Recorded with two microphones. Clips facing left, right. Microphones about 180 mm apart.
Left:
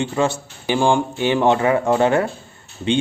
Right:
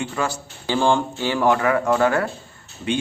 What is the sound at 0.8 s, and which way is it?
Speech, 15° left (ahead or behind).